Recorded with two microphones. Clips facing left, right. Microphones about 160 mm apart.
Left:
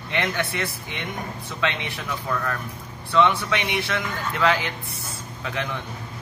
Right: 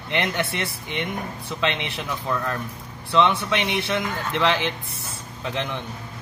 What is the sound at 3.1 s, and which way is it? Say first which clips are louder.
Speech: even; 25° right (ahead or behind).